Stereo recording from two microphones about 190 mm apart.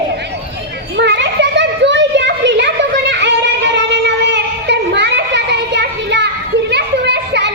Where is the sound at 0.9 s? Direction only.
65° right (ahead or behind).